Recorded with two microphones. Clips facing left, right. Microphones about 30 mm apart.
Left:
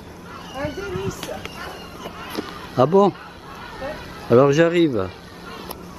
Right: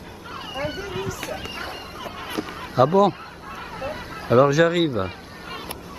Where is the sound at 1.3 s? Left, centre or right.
Right.